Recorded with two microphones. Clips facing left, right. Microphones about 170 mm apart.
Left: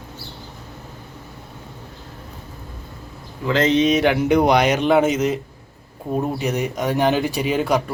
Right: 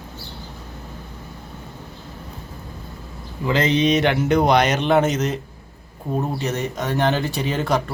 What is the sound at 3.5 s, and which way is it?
Speech, centre (ahead or behind).